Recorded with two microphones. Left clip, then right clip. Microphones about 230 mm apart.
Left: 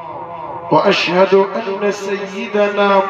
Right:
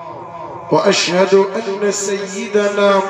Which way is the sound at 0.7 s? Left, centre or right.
Left.